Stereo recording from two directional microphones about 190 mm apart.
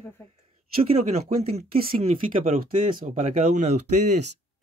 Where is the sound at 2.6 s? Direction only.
45° right (ahead or behind).